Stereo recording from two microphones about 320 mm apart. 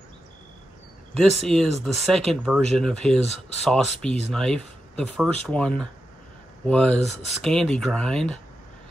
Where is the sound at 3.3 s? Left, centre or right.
Left.